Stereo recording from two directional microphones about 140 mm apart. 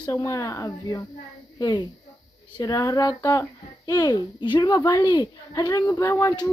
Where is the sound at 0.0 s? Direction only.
25° left (ahead or behind).